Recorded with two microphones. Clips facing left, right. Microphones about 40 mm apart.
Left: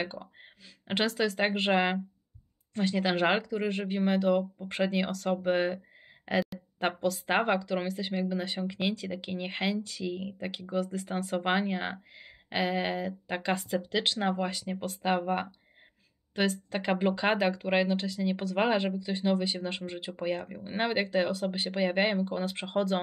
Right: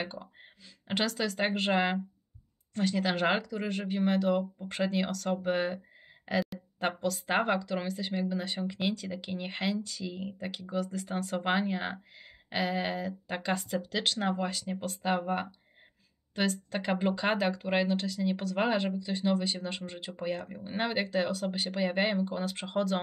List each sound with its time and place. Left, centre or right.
0.0 s speech: centre
4.6 s speech: centre
16.7 s speech: centre